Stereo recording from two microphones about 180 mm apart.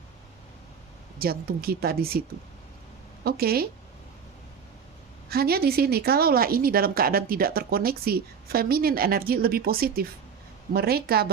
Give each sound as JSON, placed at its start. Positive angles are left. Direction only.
{"t": 1.2, "sound": "speech", "side_deg": -55}
{"t": 3.2, "sound": "speech", "side_deg": -60}
{"t": 5.3, "sound": "speech", "side_deg": -60}